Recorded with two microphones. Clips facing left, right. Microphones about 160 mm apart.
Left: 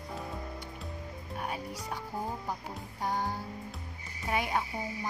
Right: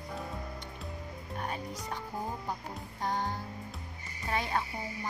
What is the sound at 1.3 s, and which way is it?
Music, 5° left (ahead or behind).